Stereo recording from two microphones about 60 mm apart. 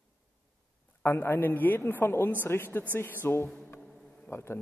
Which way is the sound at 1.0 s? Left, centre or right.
Left.